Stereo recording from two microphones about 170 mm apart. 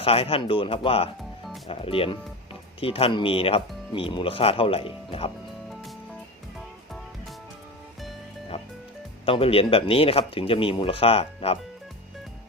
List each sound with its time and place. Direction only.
0.0 s speech: 35° left (ahead or behind)
9.2 s speech: 35° left (ahead or behind)